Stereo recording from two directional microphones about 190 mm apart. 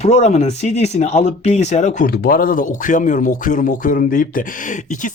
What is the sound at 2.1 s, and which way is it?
Speech, 50° left (ahead or behind).